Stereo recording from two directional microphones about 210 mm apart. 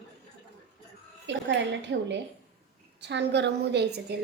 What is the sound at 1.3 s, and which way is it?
A woman's voice, 55° right (ahead or behind).